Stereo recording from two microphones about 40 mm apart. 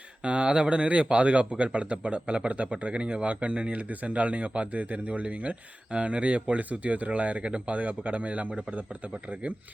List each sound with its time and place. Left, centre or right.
0.3 s speech: right